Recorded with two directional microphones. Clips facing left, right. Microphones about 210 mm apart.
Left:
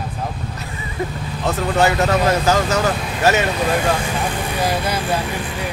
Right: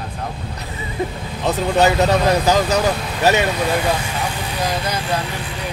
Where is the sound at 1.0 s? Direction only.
20° right (ahead or behind).